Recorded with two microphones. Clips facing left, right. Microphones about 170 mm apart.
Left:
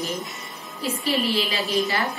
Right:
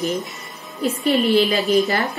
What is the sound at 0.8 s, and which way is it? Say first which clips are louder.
Speech: right 6 dB; 45° right (ahead or behind).